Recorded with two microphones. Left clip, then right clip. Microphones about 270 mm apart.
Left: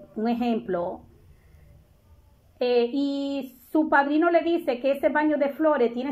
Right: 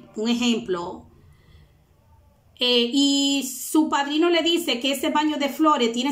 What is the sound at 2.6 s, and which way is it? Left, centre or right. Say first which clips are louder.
A woman's voice: right 3 dB; centre.